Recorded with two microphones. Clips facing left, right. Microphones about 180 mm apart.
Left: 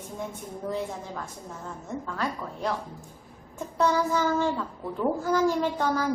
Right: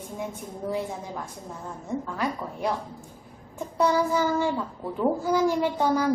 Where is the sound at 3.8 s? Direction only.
10° right (ahead or behind).